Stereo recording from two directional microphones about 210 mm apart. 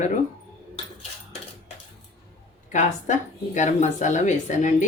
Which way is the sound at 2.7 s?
35° left (ahead or behind).